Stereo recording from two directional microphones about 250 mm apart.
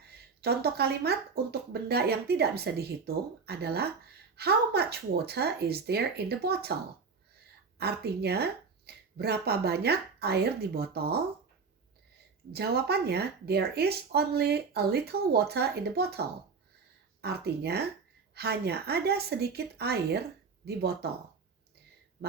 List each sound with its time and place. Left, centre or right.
0.4 s speech: right
7.8 s speech: right
12.5 s speech: right